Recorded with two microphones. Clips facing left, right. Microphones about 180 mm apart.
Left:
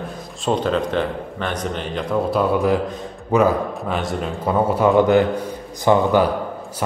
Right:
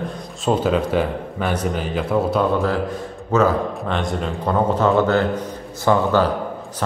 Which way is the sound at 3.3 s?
15° left (ahead or behind).